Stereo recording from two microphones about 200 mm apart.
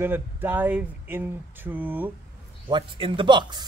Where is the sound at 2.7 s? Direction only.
25° right (ahead or behind).